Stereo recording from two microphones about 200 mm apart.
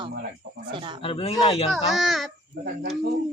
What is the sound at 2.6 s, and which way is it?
Speech, 50° right (ahead or behind).